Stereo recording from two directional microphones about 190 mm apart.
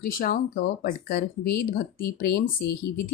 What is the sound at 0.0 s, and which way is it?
Speech, 50° left (ahead or behind).